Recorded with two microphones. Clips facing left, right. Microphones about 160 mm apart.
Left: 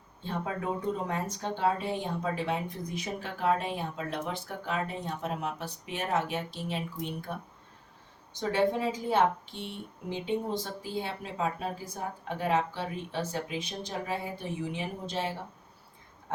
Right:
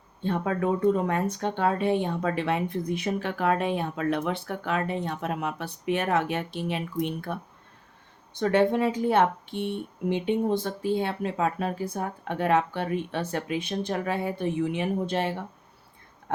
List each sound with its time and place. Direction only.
0.2 s speech: 60° right (ahead or behind)